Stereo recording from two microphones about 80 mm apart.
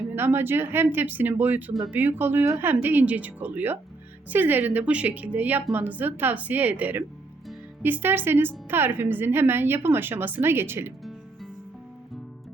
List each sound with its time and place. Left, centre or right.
0.2 s a woman's voice: right